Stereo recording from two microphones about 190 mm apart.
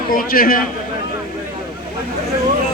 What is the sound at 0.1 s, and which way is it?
Speech, 50° left (ahead or behind).